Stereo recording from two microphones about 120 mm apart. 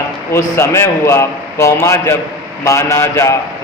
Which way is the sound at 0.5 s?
20° left (ahead or behind).